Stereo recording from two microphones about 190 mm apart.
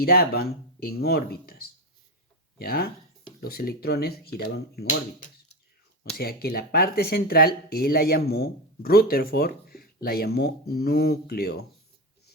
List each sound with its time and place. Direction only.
0.0 s speech: 55° left (ahead or behind)
6.1 s speech: 55° left (ahead or behind)